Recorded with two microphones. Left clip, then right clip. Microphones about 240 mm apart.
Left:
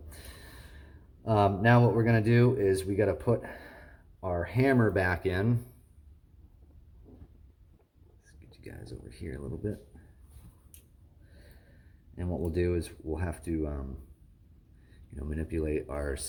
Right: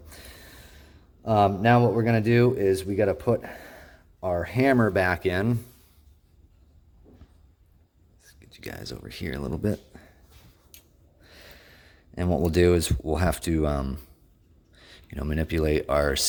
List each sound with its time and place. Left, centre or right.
0.1 s speech: right
8.2 s speech: right
9.9 s a sound: right
11.4 s speech: right
15.1 s speech: right